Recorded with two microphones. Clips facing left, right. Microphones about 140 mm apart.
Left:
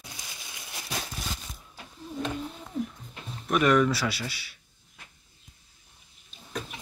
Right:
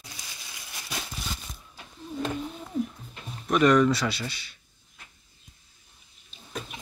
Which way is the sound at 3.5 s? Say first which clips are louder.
Right 2 dB; 5° left (ahead or behind).